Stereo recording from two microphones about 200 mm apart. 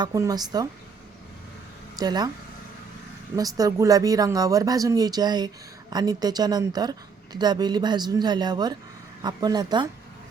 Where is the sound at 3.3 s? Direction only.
20° right (ahead or behind).